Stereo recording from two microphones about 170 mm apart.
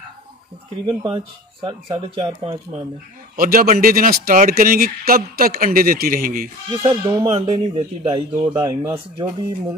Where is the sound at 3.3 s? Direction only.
55° right (ahead or behind).